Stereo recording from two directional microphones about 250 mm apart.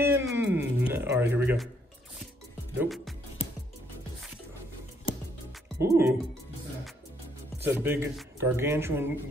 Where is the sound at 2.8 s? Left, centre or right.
Centre.